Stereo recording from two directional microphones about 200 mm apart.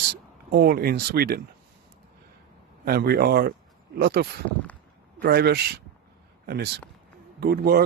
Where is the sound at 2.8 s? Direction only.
50° right (ahead or behind).